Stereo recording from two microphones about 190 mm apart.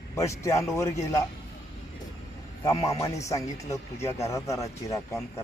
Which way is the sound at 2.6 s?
15° left (ahead or behind).